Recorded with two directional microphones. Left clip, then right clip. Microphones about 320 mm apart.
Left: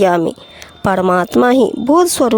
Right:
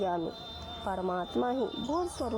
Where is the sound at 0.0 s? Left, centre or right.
Left.